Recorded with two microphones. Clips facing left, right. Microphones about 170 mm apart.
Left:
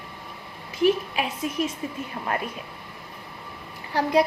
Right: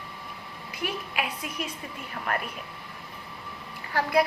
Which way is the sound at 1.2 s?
25° left (ahead or behind).